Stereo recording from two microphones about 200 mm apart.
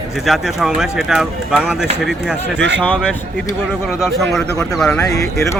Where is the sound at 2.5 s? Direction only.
65° right (ahead or behind).